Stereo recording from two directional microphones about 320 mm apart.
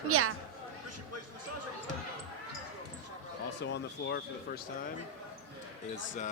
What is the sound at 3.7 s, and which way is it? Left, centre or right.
Speech, left.